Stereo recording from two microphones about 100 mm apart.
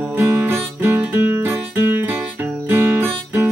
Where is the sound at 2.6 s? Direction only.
25° right (ahead or behind).